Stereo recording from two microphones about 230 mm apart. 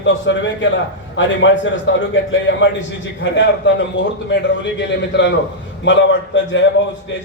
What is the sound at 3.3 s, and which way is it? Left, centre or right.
A man's voice, left.